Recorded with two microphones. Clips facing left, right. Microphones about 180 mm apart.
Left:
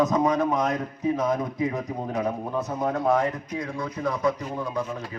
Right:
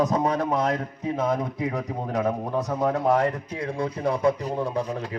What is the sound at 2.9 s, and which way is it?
Speech, 35° right (ahead or behind).